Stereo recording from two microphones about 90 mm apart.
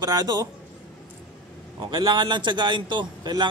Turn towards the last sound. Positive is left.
turn(degrees=-55)  # may be behind; listen again after turning